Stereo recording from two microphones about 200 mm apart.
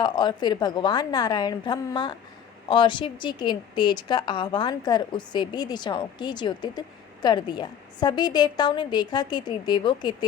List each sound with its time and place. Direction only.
0.0 s a woman's voice: 20° left (ahead or behind)